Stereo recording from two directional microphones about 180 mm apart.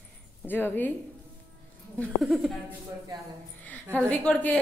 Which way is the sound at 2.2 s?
5° right (ahead or behind).